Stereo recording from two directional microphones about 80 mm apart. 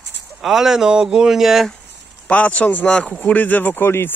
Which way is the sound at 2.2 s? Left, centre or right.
Centre.